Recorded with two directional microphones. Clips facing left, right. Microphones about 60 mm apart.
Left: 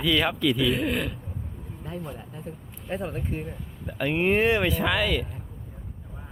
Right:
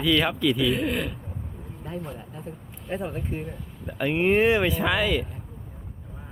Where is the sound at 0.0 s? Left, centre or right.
Centre.